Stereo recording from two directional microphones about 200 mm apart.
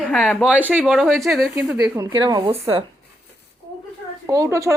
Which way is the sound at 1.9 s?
20° right (ahead or behind).